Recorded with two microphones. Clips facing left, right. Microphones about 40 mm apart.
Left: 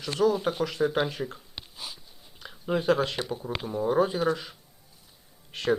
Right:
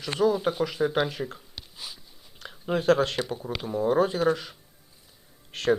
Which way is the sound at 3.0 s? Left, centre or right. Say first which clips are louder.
Right 2 dB; centre.